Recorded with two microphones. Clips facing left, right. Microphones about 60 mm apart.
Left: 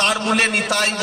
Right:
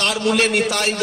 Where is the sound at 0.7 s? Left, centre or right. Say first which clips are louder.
Left 1 dB; centre.